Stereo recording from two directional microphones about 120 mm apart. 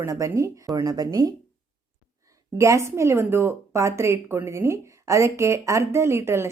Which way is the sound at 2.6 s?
25° right (ahead or behind).